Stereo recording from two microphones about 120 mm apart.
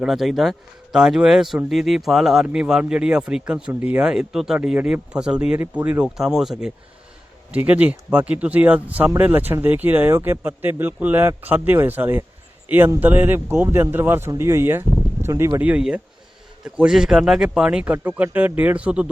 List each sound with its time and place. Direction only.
0.0 s speech: centre (ahead or behind)
4.0 s speech: 5° right (ahead or behind); by 15.6 s 25° right (ahead or behind)
15.6 s speech: 10° right (ahead or behind)